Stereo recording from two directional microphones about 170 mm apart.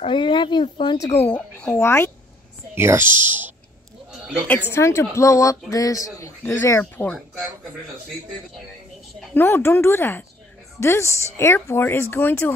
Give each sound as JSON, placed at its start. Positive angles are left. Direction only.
{"t": 0.0, "sound": "speech", "side_deg": 30}
{"t": 1.2, "sound": "speech", "side_deg": 10}
{"t": 2.7, "sound": "speech", "side_deg": -15}
{"t": 4.6, "sound": "speech", "side_deg": 15}
{"t": 9.2, "sound": "speech", "side_deg": 10}